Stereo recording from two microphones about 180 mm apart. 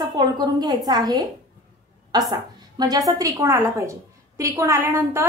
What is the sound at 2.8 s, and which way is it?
A woman's voice, 20° right (ahead or behind).